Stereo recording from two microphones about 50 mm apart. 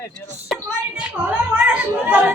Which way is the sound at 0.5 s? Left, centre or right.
Centre.